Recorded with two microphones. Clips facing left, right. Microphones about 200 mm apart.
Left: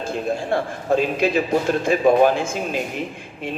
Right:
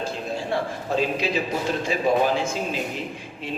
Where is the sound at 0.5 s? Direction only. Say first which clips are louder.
Left 4 dB; 50° left (ahead or behind).